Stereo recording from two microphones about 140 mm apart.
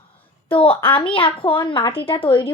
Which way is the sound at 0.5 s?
40° left (ahead or behind).